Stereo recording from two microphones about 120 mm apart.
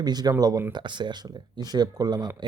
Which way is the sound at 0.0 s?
35° right (ahead or behind).